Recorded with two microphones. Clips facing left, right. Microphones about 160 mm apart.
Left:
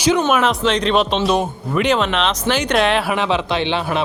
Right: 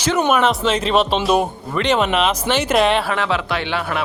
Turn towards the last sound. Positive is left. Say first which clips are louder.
# left 3 dB
turn(degrees=20)  # may be behind; listen again after turning